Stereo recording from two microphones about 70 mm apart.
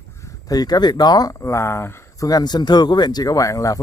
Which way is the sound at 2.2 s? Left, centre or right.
Left.